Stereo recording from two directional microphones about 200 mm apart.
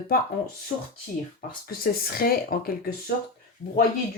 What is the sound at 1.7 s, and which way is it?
Speech, 45° left (ahead or behind).